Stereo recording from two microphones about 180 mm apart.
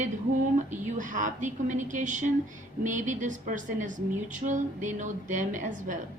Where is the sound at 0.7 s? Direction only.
45° right (ahead or behind).